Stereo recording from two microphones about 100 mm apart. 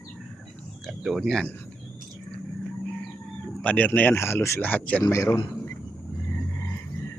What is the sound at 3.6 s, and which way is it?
Speech, 15° left (ahead or behind).